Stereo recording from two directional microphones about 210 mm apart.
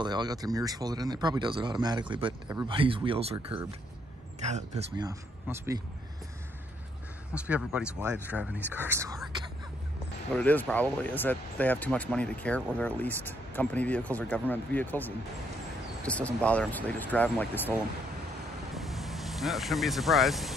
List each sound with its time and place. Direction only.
0.0 s speech: 20° right (ahead or behind)
4.9 s speech: 15° right (ahead or behind)
7.3 s speech: 5° right (ahead or behind)
10.3 s speech: 5° left (ahead or behind)
18.7 s vehicle: centre (ahead or behind)